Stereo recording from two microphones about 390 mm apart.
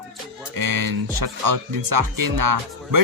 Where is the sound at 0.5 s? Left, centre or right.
Right.